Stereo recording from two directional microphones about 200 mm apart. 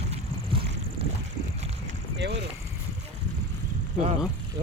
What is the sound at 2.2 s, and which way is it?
Boat, 55° right (ahead or behind).